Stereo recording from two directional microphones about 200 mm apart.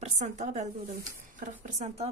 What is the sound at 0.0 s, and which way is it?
A woman's voice, 35° right (ahead or behind).